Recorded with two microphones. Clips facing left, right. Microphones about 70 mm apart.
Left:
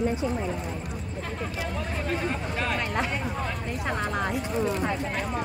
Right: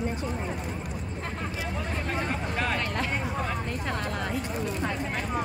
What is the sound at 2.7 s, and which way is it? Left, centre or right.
Speech, centre.